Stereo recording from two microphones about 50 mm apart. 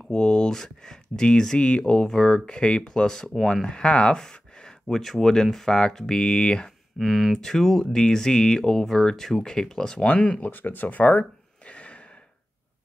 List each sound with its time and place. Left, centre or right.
0.1 s speech: centre
7.0 s speech: centre
7.3 s speech: centre
9.9 s speech: left
11.7 s gasp: left